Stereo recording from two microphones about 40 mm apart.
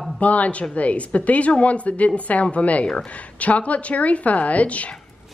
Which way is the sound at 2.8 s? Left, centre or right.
Left.